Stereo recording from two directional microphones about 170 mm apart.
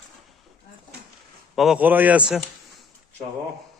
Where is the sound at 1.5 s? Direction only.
Centre (ahead or behind).